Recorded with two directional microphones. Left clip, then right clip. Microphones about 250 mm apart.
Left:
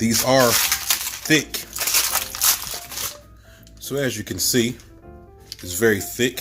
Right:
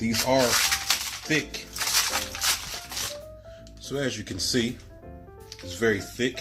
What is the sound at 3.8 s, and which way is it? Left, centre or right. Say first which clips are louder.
Speech: left 5 dB; left.